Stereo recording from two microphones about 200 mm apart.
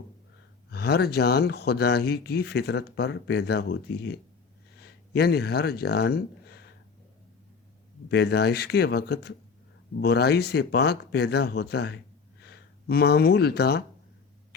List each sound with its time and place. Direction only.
0.7 s speech: 55° left (ahead or behind)
8.1 s speech: 55° left (ahead or behind)